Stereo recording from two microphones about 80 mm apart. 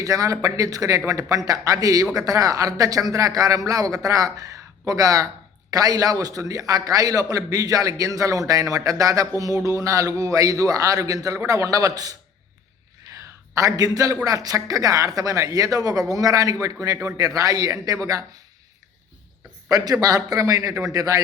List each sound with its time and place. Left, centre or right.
0.0 s a man's voice: right
13.1 s a sound: right
14.3 s a man's voice: right
19.6 s a man's voice: right